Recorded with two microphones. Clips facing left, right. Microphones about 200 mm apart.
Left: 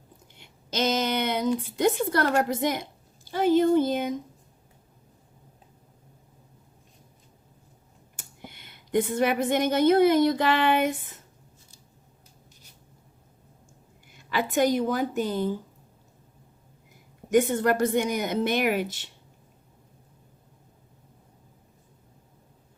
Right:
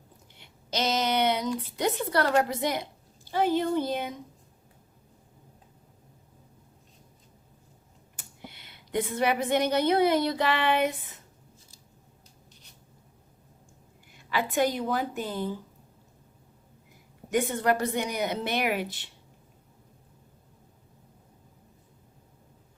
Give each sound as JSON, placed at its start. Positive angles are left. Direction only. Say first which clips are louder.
{"t": 0.3, "sound": "a sound", "louder": "left 2 dB", "side_deg": 50}
{"t": 1.6, "sound": "a woman's voice", "louder": "left 5 dB", "side_deg": 50}
{"t": 8.1, "sound": "a woman's voice", "louder": "left 1 dB", "side_deg": 45}
{"t": 14.3, "sound": "a woman's voice", "louder": "left 3 dB", "side_deg": 45}
{"t": 17.3, "sound": "a woman's voice", "louder": "left 4 dB", "side_deg": 45}